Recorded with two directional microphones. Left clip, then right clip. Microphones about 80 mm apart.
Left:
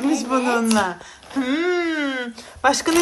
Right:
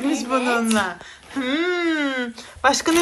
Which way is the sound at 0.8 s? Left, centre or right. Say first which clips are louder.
Left 2 dB; left.